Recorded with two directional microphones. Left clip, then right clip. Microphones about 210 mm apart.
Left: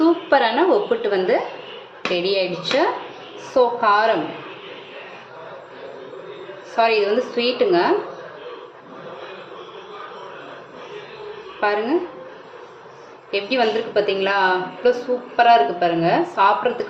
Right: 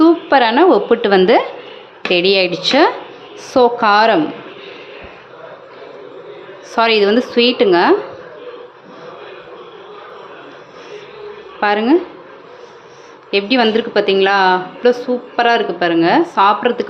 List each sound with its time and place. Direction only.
0.0 s a woman's voice: 35° right (ahead or behind)
6.7 s a woman's voice: 45° right (ahead or behind)
11.6 s a woman's voice: 40° right (ahead or behind)
13.3 s a woman's voice: 40° right (ahead or behind)